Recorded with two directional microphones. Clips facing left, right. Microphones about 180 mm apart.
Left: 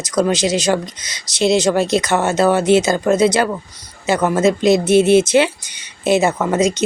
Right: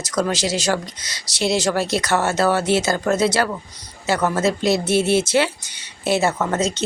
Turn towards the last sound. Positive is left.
turn(degrees=15)  # may be behind; listen again after turning